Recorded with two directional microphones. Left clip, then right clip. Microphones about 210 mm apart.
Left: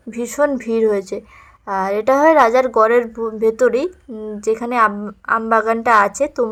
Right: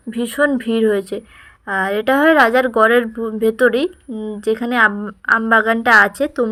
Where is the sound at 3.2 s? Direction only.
20° right (ahead or behind).